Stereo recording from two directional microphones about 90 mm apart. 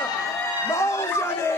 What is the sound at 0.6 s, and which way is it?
Speech, 30° left (ahead or behind).